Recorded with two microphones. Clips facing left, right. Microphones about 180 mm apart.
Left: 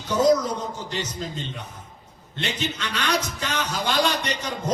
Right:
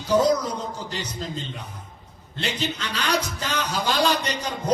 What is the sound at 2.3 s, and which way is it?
Music, 35° right (ahead or behind).